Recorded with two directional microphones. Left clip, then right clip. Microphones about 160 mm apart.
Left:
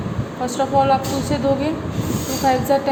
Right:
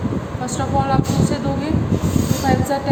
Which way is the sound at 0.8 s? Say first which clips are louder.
Left 2 dB; 30° left (ahead or behind).